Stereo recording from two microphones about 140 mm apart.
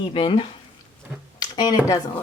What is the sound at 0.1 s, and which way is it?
Speech, 40° left (ahead or behind).